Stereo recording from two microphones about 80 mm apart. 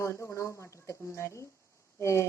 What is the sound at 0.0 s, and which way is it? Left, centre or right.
A woman's voice, left.